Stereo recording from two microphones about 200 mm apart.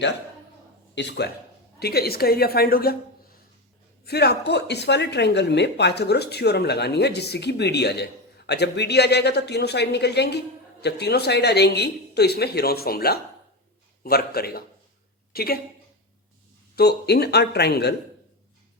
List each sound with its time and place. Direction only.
0.9 s speech: 60° left (ahead or behind)
4.0 s a woman's voice: 55° left (ahead or behind)
16.7 s speech: 55° left (ahead or behind)